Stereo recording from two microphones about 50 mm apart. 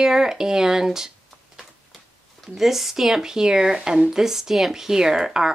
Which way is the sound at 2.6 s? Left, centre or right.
Centre.